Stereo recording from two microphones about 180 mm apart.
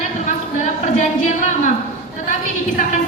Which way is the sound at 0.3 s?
45° left (ahead or behind).